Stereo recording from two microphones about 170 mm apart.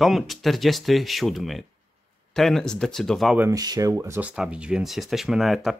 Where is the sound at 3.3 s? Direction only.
20° right (ahead or behind).